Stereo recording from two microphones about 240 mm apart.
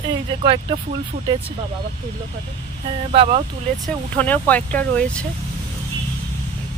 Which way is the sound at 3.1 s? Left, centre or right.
Right.